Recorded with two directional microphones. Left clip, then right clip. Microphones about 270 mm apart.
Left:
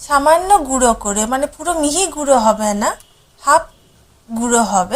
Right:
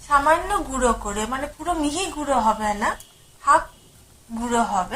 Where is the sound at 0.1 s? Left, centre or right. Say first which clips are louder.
Left 7 dB; left.